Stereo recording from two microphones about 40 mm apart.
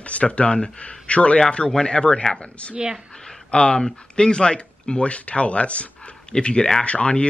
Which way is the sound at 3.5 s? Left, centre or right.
Left.